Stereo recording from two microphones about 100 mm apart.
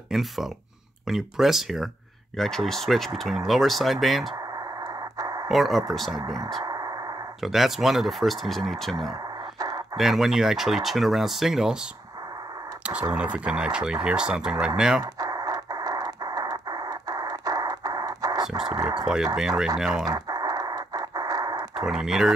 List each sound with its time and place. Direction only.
0.1 s speech: centre (ahead or behind)
5.1 s a sound: 40° right (ahead or behind)
5.5 s speech: centre (ahead or behind)
6.6 s a sound: 40° right (ahead or behind)
7.4 s speech: centre (ahead or behind)
9.6 s a sound: 40° right (ahead or behind)
9.9 s speech: 5° right (ahead or behind)
13.1 s speech: 10° right (ahead or behind)
15.1 s radio: 40° right (ahead or behind)
18.9 s speech: 5° right (ahead or behind)
20.1 s a sound: 40° right (ahead or behind)
21.7 s speech: 5° right (ahead or behind)